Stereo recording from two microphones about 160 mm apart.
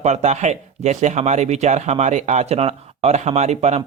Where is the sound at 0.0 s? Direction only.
45° right (ahead or behind).